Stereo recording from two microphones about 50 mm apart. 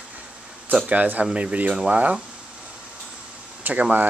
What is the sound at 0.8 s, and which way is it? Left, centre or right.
Speech, right.